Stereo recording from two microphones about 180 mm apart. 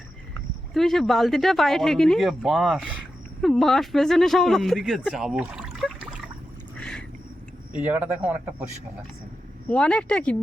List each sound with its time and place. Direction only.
0.7 s speech: centre (ahead or behind)
6.7 s a sound: 5° left (ahead or behind)
7.7 s speech: 10° right (ahead or behind)
9.6 s speech: 5° left (ahead or behind)